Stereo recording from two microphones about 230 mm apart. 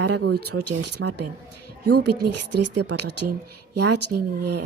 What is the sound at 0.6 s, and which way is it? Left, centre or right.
Speech, right.